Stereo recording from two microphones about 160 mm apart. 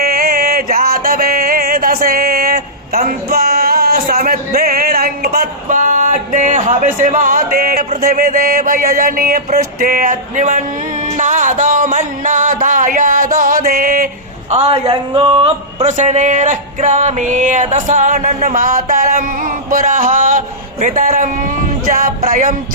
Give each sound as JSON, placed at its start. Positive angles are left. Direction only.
{"t": 0.0, "sound": "music", "side_deg": -65}
{"t": 8.0, "sound": "a sound", "side_deg": -60}
{"t": 11.0, "sound": "music", "side_deg": -55}
{"t": 14.5, "sound": "speech", "side_deg": -35}